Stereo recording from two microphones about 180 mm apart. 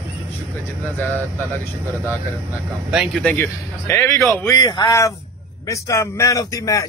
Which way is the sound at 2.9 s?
Centre (ahead or behind).